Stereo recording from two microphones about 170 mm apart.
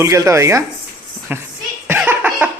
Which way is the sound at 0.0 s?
20° right (ahead or behind).